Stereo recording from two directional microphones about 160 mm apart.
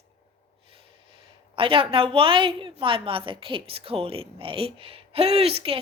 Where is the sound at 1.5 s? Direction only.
35° right (ahead or behind).